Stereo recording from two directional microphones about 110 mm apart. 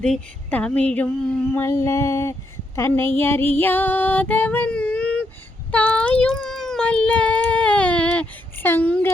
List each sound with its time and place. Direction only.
0.0 s child singing: 10° left (ahead or behind)
1.5 s a sound: 25° left (ahead or behind)
3.2 s child singing: 20° left (ahead or behind)
5.7 s speech: 10° left (ahead or behind)